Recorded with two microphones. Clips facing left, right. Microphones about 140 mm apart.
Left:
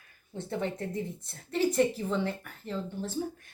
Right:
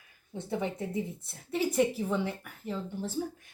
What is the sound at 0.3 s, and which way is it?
Cutlery, 10° right (ahead or behind).